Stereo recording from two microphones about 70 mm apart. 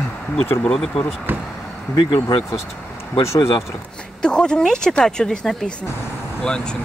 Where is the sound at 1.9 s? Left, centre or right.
Left.